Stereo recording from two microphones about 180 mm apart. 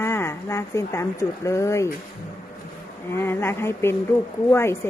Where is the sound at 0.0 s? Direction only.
15° left (ahead or behind).